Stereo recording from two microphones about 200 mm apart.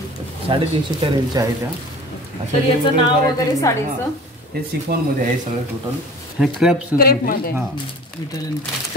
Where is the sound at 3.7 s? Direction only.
15° left (ahead or behind).